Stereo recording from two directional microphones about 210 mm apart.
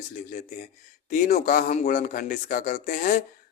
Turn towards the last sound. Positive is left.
turn(degrees=40)  # may be behind; listen again after turning